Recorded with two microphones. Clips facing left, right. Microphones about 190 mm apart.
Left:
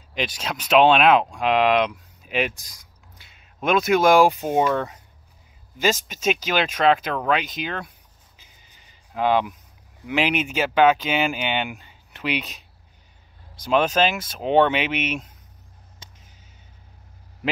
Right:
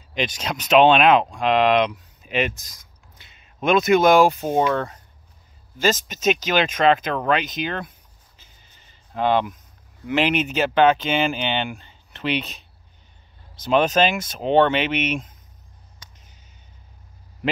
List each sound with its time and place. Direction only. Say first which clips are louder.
0.1 s speech: right 2 dB; 5° left (ahead or behind)
1.3 s a sound: right 1 dB; 10° left (ahead or behind)
3.6 s speech: right 2 dB; 5° left (ahead or behind)
8.4 s music: even; 15° left (ahead or behind)
9.1 s speech: even; 5° left (ahead or behind)